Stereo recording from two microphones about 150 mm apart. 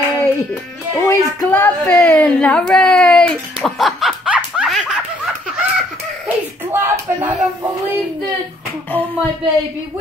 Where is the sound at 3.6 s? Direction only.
Centre (ahead or behind).